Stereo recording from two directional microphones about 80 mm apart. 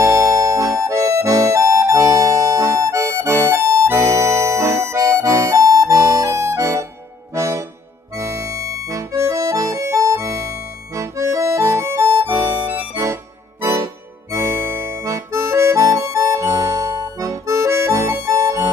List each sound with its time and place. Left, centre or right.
0.0 s music: right
7.3 s accordion: right
12.9 s music: right
14.3 s accordion: right